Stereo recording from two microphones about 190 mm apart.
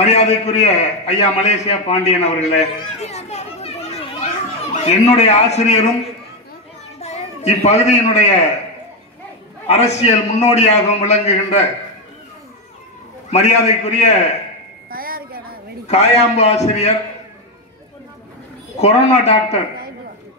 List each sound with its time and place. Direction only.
0.0 s a man's voice: 35° left (ahead or behind)
7.0 s a man's voice: 35° left (ahead or behind)
9.7 s a man's voice: 35° left (ahead or behind)
13.3 s a man's voice: 35° left (ahead or behind)
14.9 s a sound: 50° right (ahead or behind)
15.9 s a man's voice: 35° left (ahead or behind)
18.8 s a man's voice: 35° left (ahead or behind)